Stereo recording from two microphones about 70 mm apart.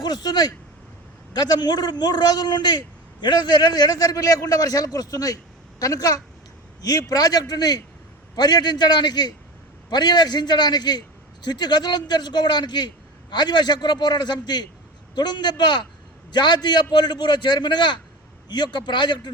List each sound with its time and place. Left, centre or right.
0.0 s a man's voice: left